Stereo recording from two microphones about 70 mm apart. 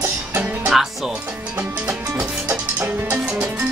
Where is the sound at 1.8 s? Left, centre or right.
Right.